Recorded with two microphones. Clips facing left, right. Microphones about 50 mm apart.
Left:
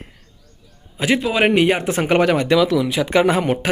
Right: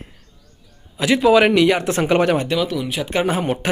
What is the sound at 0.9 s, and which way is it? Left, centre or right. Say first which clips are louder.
Speech: even; left.